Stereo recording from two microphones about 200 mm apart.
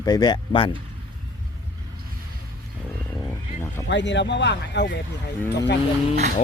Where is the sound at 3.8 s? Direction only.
60° left (ahead or behind).